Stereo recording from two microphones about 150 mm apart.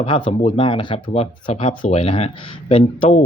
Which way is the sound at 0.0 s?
35° left (ahead or behind).